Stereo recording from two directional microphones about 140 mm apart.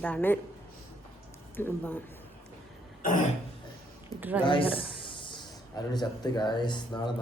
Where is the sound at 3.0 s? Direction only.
70° left (ahead or behind).